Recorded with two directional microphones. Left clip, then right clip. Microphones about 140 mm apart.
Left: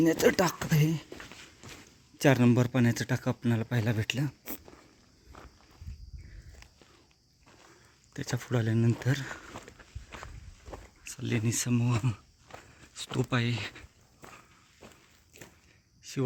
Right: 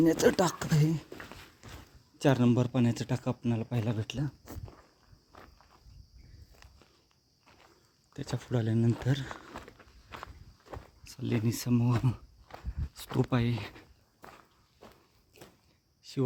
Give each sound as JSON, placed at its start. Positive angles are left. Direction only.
{"t": 0.0, "sound": "speech", "side_deg": -15}
{"t": 1.6, "sound": "a sound", "side_deg": 5}
{"t": 2.1, "sound": "speech", "side_deg": 15}
{"t": 5.3, "sound": "walk", "side_deg": 5}
{"t": 8.1, "sound": "speech", "side_deg": 0}
{"t": 10.1, "sound": "walk", "side_deg": -5}
{"t": 10.7, "sound": "a sound", "side_deg": -5}
{"t": 11.0, "sound": "speech", "side_deg": -15}
{"t": 12.9, "sound": "speech", "side_deg": -35}
{"t": 14.2, "sound": "walk", "side_deg": -5}
{"t": 16.0, "sound": "a sound", "side_deg": -20}